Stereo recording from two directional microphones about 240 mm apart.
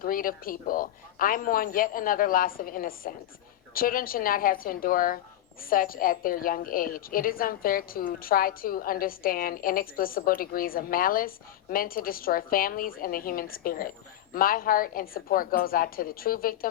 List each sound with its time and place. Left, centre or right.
0.0 s a woman's voice: left